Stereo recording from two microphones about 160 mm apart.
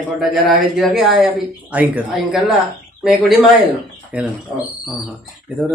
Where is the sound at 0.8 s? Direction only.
Centre (ahead or behind).